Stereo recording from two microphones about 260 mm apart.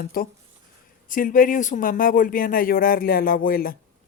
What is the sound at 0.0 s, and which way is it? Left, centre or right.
Speech, left.